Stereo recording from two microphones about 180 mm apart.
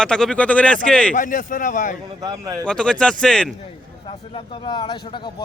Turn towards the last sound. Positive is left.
turn(degrees=25)  # may be behind; listen again after turning